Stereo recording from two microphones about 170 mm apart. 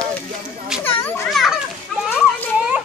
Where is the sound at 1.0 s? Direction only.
10° left (ahead or behind).